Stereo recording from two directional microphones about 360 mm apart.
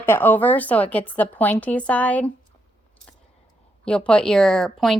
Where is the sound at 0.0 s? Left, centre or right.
Centre.